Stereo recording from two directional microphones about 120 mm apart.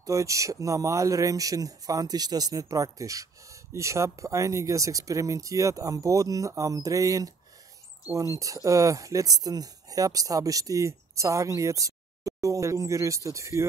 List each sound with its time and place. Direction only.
0.0 s speech: 25° right (ahead or behind)